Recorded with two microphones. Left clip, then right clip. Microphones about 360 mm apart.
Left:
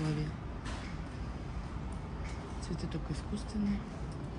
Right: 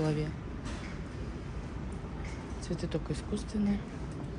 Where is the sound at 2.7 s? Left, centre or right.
Centre.